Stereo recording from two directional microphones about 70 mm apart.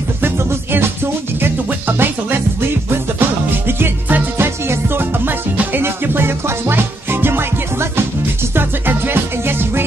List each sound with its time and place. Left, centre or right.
0.2 s music: right